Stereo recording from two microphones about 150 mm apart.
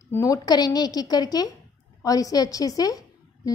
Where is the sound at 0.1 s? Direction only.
20° left (ahead or behind).